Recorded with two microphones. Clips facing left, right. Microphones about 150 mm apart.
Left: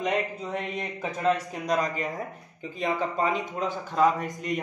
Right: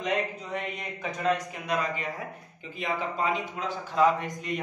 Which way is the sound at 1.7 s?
40° left (ahead or behind).